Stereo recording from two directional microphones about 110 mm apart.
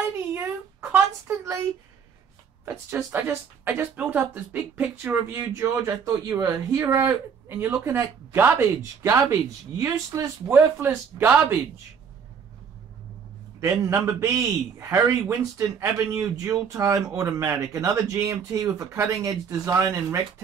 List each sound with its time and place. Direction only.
0.3 s a sound: 20° right (ahead or behind)
2.6 s speech: 20° right (ahead or behind)
4.9 s speech: 20° right (ahead or behind)
10.5 s speech: 20° right (ahead or behind)
13.6 s speech: 25° right (ahead or behind)